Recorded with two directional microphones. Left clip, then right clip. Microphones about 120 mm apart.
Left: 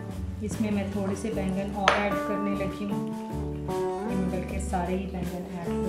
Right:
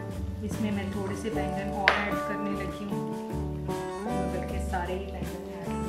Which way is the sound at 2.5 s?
Centre (ahead or behind).